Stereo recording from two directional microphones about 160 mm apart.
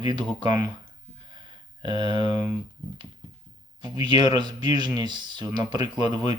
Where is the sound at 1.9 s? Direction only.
35° left (ahead or behind).